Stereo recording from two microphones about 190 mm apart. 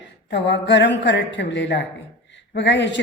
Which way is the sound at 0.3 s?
65° left (ahead or behind).